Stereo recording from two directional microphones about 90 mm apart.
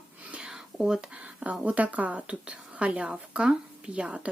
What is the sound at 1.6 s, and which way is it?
Speech, 15° right (ahead or behind).